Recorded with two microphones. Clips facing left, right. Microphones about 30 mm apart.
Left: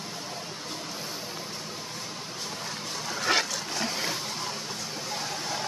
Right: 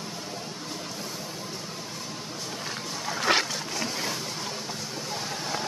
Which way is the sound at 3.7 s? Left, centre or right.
Centre.